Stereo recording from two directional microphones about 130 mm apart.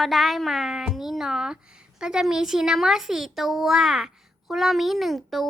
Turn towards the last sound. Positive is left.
turn(degrees=0)  # may be behind; listen again after turning